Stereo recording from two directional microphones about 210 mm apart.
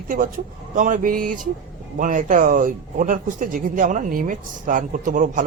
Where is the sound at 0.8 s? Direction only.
40° right (ahead or behind).